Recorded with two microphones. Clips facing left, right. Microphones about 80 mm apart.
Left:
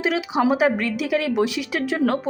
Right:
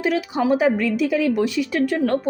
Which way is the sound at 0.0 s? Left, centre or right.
Left.